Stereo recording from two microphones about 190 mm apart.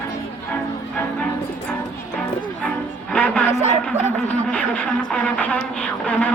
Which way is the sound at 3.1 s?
5° left (ahead or behind).